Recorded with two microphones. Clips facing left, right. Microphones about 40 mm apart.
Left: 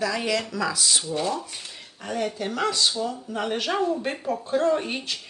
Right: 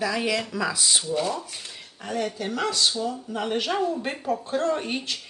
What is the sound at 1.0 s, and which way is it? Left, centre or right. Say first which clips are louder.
Speech: even; centre.